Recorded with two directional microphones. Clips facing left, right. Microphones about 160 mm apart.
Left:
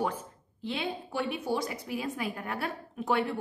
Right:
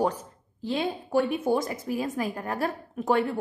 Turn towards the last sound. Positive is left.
turn(degrees=-45)  # may be behind; listen again after turning